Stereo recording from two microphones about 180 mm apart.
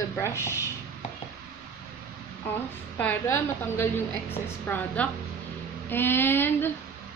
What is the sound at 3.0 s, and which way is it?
A woman's voice, 10° left (ahead or behind).